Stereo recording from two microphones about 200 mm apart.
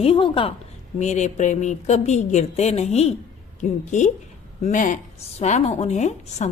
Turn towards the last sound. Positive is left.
turn(degrees=35)  # may be behind; listen again after turning